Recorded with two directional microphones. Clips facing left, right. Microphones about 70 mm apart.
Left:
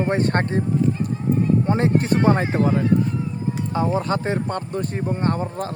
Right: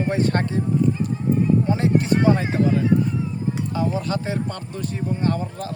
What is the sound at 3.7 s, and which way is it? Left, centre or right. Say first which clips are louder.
Speech: left 4 dB; left.